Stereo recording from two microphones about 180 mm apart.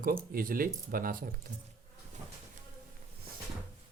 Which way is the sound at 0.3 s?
55° right (ahead or behind).